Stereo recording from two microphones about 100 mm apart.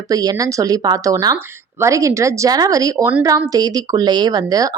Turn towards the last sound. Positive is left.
turn(degrees=-40)  # may be behind; listen again after turning